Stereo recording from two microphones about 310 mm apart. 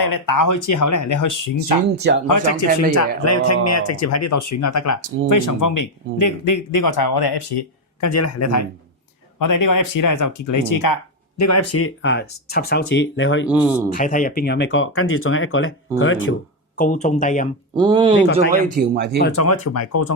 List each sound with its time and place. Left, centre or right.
0.1 s speech: left
2.2 s speech: left
8.0 s speech: left
9.4 s speech: left
11.3 s speech: left
13.5 s speech: centre
13.9 s speech: left
16.7 s speech: left
17.7 s speech: centre
18.8 s speech: right
19.4 s speech: left